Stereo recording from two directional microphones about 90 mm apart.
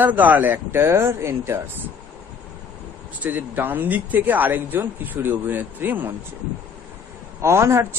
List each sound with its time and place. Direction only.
0.0 s speech: 20° right (ahead or behind)
3.2 s speech: 20° right (ahead or behind)
7.4 s a man's voice: 30° right (ahead or behind)